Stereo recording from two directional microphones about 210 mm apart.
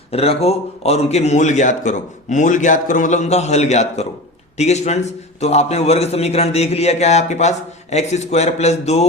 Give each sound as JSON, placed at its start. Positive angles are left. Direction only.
{"t": 0.1, "sound": "a man's voice", "side_deg": 30}